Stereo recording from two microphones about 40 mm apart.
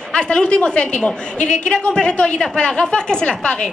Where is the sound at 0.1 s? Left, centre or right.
Left.